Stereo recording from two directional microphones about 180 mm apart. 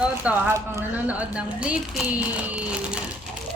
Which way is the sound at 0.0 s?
10° right (ahead or behind).